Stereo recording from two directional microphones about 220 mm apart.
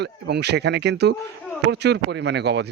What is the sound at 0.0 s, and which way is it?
Speech, 50° right (ahead or behind).